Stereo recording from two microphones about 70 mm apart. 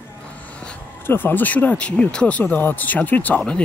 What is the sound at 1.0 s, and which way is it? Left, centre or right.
Speech, left.